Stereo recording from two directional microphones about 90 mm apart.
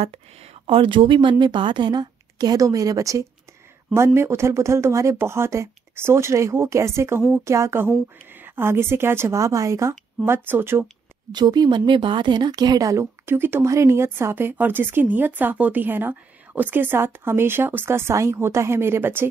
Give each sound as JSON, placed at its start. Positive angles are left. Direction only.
{"t": 0.7, "sound": "speech", "side_deg": -75}
{"t": 11.3, "sound": "speech", "side_deg": -50}
{"t": 13.0, "sound": "speech", "side_deg": -25}